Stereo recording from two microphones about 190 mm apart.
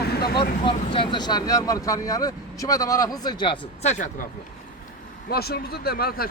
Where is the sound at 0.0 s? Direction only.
55° left (ahead or behind).